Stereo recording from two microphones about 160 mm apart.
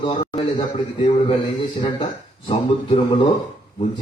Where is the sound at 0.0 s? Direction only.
30° left (ahead or behind).